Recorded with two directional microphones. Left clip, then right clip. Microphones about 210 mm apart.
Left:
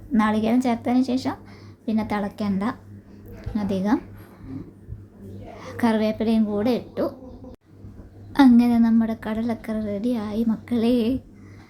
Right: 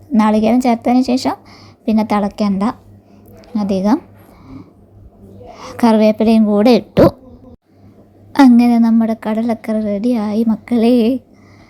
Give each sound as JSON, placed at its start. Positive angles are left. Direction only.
{"t": 0.1, "sound": "a woman's voice", "side_deg": -30}
{"t": 5.5, "sound": "a woman's voice", "side_deg": -30}
{"t": 8.3, "sound": "a woman's voice", "side_deg": -30}